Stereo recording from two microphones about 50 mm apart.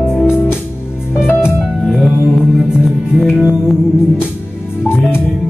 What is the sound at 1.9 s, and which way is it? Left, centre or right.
Music, centre.